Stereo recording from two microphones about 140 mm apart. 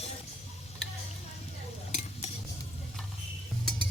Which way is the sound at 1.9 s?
55° left (ahead or behind).